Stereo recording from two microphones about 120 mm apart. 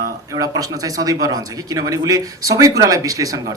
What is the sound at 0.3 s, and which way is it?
Speech, 30° right (ahead or behind).